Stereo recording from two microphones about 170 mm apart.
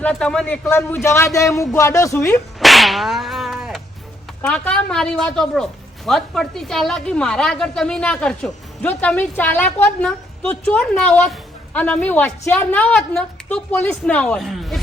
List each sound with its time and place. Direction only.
0.0 s a woman's voice: 5° left (ahead or behind)
2.6 s whip: centre (ahead or behind)
4.4 s a woman's voice: 5° left (ahead or behind)